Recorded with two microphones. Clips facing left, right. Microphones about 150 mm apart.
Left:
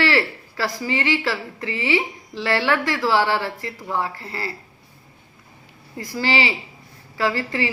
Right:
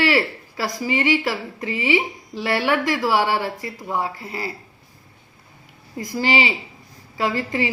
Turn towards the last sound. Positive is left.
turn(degrees=-15)  # may be behind; listen again after turning